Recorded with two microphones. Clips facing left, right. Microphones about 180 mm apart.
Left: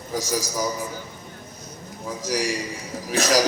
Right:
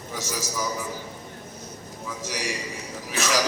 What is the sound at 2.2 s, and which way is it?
A man's voice, 40° left (ahead or behind).